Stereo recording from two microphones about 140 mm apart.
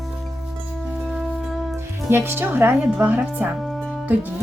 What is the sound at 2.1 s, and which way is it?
Speech, 15° right (ahead or behind).